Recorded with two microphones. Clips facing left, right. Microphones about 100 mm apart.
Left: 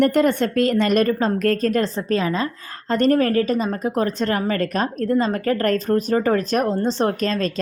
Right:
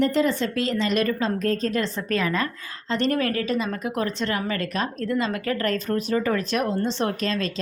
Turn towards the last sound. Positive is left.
turn(degrees=40)  # may be behind; listen again after turning